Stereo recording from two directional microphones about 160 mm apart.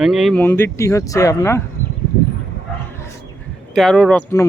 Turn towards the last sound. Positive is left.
turn(degrees=5)  # may be behind; listen again after turning